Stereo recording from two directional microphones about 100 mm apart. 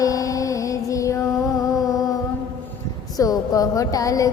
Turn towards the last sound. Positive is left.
turn(degrees=35)  # may be behind; listen again after turning